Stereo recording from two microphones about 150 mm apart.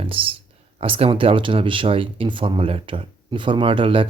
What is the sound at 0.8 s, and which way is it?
Speech, 40° right (ahead or behind).